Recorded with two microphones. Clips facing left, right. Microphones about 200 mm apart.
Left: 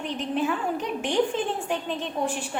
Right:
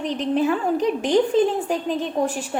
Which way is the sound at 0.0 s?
40° right (ahead or behind).